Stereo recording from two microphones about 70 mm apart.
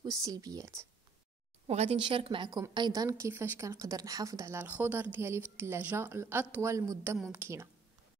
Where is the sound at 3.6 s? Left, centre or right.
Right.